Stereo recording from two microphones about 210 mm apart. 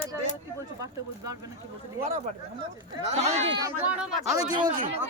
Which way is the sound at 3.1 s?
30° right (ahead or behind).